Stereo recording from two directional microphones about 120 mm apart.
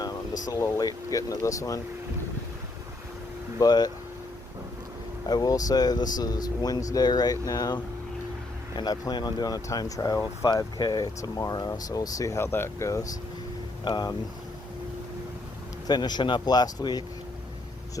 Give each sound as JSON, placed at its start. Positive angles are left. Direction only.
{"t": 0.4, "sound": "speech", "side_deg": 30}
{"t": 3.6, "sound": "speech", "side_deg": 35}
{"t": 5.2, "sound": "speech", "side_deg": 35}
{"t": 13.8, "sound": "speech", "side_deg": 35}
{"t": 15.9, "sound": "speech", "side_deg": 35}